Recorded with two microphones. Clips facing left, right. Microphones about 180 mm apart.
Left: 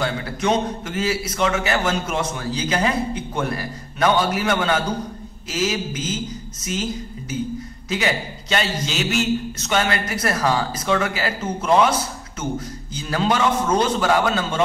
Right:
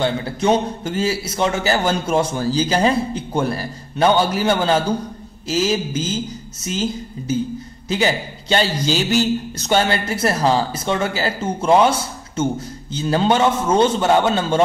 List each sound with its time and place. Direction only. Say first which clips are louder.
0.0 s a man's voice: right 4 dB; 30° right (ahead or behind)
12.9 s a man's voice: right 4 dB; 25° right (ahead or behind)